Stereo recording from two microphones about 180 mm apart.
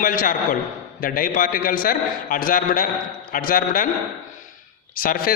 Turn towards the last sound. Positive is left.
turn(degrees=50)  # may be behind; listen again after turning